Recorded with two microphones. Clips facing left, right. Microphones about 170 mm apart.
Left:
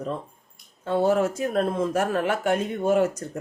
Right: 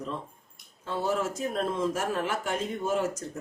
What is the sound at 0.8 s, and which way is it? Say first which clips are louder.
Speech: left 8 dB; 60° left (ahead or behind).